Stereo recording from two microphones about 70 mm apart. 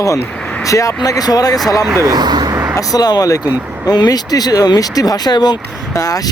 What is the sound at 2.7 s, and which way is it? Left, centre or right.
Speech, left.